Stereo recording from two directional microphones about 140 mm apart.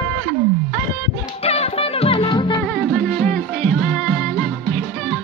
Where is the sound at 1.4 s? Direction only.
45° left (ahead or behind).